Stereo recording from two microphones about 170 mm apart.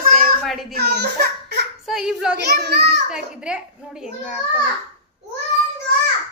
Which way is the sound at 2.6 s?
75° right (ahead or behind).